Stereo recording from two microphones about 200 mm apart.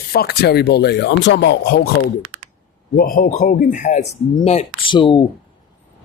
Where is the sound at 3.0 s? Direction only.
45° left (ahead or behind).